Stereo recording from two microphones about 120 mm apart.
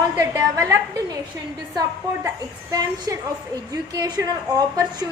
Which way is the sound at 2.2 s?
30° right (ahead or behind).